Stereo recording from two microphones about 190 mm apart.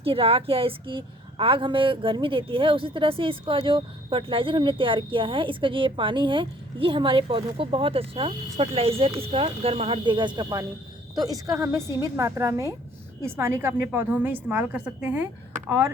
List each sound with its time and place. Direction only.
0.0 s a woman's voice: 30° right (ahead or behind); by 15.3 s 10° right (ahead or behind)